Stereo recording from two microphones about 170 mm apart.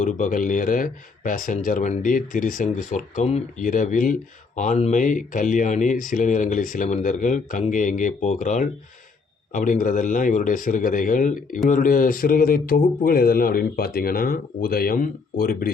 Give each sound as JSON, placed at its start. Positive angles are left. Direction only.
{"t": 0.0, "sound": "speech", "side_deg": 50}